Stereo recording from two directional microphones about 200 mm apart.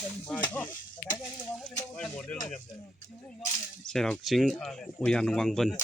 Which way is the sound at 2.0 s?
5° left (ahead or behind).